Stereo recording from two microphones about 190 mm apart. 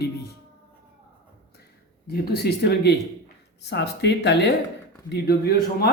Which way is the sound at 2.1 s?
55° left (ahead or behind).